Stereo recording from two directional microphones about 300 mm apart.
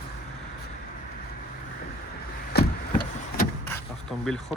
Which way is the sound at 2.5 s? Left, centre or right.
Left.